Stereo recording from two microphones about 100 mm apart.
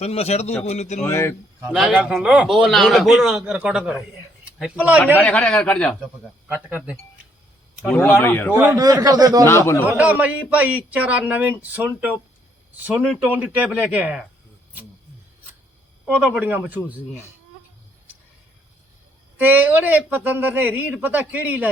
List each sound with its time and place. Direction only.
0.0 s a man's voice: 90° left
1.0 s speech: 25° left (ahead or behind)
1.9 s speech: 10° right (ahead or behind)
5.1 s a man's voice: 15° left (ahead or behind)
6.7 s speech: 15° right (ahead or behind)
7.9 s a man's voice: 20° left (ahead or behind)
8.5 s a man's voice: 35° right (ahead or behind)
10.0 s speech: 15° right (ahead or behind)
16.0 s speech: 5° right (ahead or behind)
16.4 s speech: 15° right (ahead or behind)
19.4 s speech: 15° right (ahead or behind)